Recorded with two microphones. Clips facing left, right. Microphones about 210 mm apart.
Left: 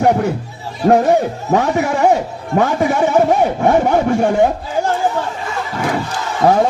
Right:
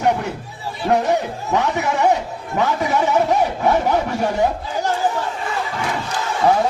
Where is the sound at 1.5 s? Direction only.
50° left (ahead or behind).